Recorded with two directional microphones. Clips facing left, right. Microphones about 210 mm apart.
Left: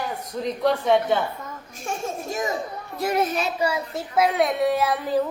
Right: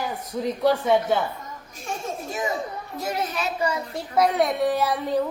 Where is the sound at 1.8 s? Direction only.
40° left (ahead or behind).